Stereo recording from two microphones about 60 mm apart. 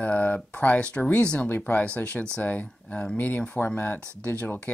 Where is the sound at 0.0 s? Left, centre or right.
Left.